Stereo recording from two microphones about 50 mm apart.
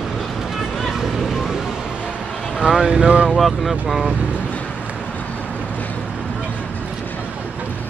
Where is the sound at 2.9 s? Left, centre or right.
Right.